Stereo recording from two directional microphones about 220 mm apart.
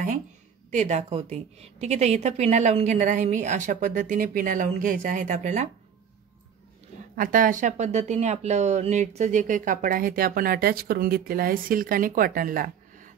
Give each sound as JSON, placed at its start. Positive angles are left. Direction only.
{"t": 0.7, "sound": "speech", "side_deg": -30}
{"t": 7.2, "sound": "speech", "side_deg": -40}